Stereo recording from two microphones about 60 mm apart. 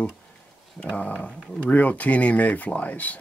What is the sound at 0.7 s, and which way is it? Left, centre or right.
Speech, left.